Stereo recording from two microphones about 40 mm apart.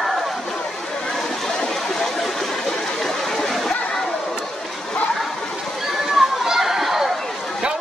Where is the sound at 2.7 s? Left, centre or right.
Left.